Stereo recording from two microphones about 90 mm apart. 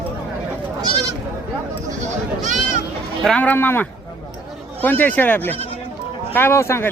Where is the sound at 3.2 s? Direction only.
15° left (ahead or behind).